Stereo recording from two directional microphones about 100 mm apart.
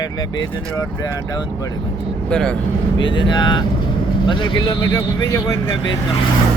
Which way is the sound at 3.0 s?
55° left (ahead or behind).